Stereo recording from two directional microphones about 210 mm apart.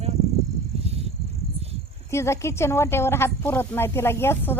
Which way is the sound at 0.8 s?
30° right (ahead or behind).